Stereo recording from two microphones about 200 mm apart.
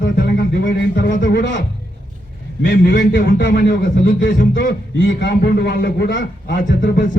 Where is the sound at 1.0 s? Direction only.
40° left (ahead or behind).